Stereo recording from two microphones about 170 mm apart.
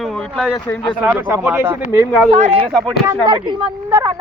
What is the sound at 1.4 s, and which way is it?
Speech, 10° right (ahead or behind).